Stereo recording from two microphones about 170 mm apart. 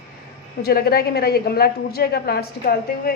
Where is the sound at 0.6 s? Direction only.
65° left (ahead or behind).